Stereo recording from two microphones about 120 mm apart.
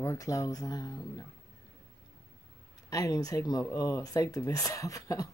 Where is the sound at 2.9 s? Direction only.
30° left (ahead or behind).